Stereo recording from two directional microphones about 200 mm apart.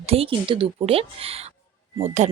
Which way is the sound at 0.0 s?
30° right (ahead or behind).